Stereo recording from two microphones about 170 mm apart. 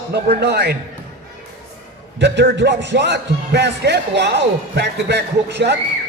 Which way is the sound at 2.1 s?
90° right.